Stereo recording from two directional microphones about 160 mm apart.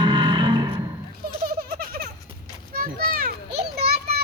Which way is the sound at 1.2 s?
70° right (ahead or behind).